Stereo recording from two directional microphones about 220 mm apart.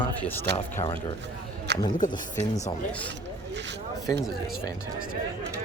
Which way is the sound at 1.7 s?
50° right (ahead or behind).